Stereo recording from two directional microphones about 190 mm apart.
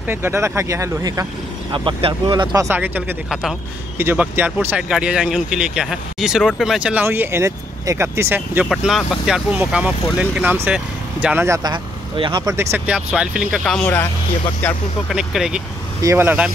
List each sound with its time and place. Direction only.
0.1 s speech: 10° right (ahead or behind)
1.7 s speech: 25° right (ahead or behind)
8.6 s speech: centre (ahead or behind)
15.0 s speech: centre (ahead or behind)
16.0 s speech: 15° right (ahead or behind)